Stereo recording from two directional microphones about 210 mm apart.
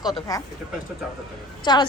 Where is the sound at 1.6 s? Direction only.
20° left (ahead or behind).